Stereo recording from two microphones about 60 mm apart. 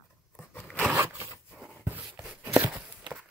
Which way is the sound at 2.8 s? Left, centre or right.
Centre.